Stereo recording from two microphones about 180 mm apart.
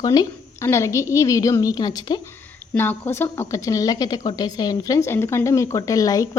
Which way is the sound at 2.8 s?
10° left (ahead or behind).